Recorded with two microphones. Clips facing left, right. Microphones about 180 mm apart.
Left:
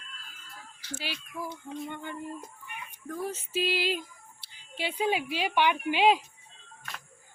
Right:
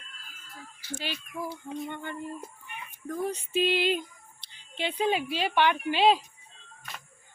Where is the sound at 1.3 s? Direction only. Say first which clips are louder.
Right 2 dB; 15° right (ahead or behind).